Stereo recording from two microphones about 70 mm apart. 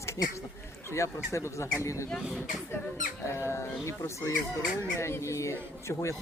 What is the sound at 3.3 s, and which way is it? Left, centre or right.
Speech, left.